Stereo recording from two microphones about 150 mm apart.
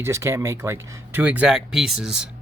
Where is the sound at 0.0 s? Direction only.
15° right (ahead or behind).